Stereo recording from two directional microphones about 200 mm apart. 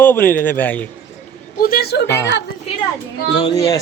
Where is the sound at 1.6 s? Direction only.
50° left (ahead or behind).